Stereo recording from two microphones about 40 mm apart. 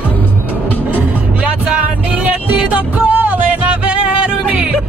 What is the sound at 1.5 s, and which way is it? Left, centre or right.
Music, right.